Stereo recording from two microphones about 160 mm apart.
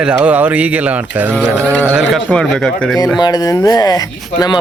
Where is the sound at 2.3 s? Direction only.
5° left (ahead or behind).